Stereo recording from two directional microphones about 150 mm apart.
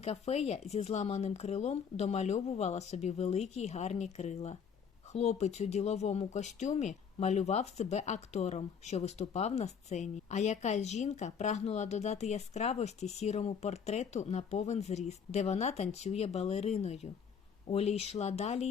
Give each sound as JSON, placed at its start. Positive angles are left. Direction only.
{"t": 0.0, "sound": "speech", "side_deg": 45}